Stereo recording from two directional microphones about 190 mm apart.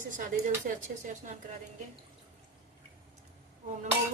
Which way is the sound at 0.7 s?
50° right (ahead or behind).